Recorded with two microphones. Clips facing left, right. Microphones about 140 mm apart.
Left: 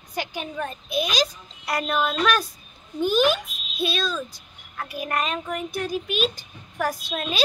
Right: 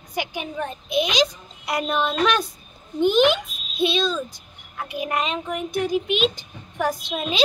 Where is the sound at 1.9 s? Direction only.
5° left (ahead or behind).